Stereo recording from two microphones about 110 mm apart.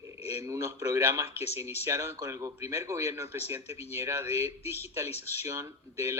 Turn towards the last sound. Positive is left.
turn(degrees=-25)  # may be behind; listen again after turning